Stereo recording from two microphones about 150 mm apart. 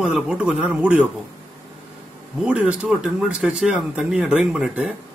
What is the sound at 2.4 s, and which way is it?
Speech, 10° right (ahead or behind).